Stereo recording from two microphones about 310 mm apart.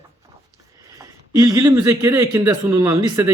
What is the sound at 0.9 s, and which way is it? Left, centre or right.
Speech, centre.